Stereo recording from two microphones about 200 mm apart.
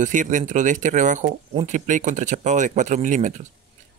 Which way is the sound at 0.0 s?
40° right (ahead or behind).